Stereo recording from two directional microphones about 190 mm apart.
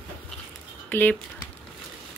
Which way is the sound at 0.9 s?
10° left (ahead or behind).